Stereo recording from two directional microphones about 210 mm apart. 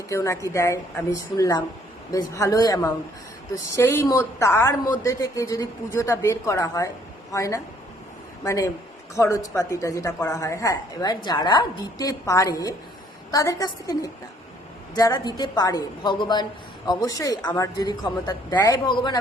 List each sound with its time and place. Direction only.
0.1 s a woman's voice: 15° left (ahead or behind)